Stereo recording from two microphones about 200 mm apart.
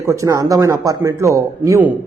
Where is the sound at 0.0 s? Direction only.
15° right (ahead or behind).